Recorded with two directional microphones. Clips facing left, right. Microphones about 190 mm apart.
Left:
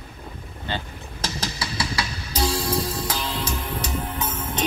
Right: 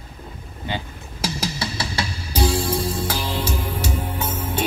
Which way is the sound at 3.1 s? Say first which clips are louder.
Right 3 dB; 10° right (ahead or behind).